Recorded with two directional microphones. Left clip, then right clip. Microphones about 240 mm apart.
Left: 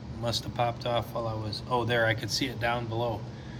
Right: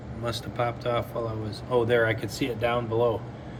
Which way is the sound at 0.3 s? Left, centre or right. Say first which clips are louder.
Even; centre.